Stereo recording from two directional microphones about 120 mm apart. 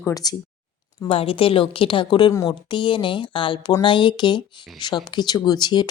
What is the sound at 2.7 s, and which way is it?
A woman's voice, 40° left (ahead or behind).